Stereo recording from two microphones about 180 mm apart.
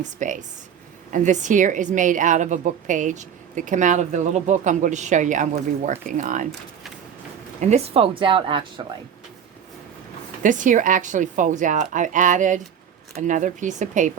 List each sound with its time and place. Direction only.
0.0 s a woman's voice: 45° right (ahead or behind)
7.6 s a woman's voice: 35° right (ahead or behind)
10.4 s a woman's voice: 45° right (ahead or behind)